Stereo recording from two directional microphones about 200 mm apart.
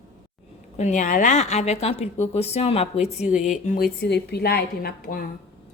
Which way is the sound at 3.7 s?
50° left (ahead or behind).